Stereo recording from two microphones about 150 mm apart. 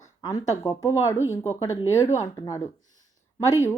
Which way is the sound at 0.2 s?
25° left (ahead or behind).